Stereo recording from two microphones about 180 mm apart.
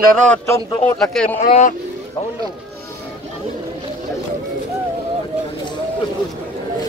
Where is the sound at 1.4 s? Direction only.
40° left (ahead or behind).